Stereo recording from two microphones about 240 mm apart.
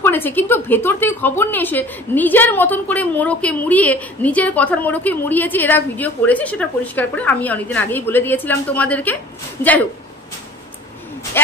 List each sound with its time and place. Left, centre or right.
0.0 s a woman's voice: centre
11.4 s a man's voice: centre